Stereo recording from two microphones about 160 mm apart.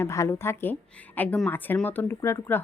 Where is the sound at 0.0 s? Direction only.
15° left (ahead or behind).